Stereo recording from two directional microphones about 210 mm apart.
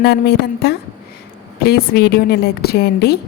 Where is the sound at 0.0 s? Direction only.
50° left (ahead or behind).